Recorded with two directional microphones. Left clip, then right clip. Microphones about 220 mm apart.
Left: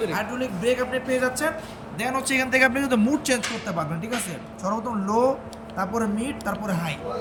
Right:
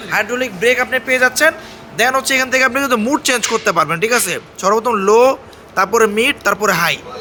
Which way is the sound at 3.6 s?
35° right (ahead or behind).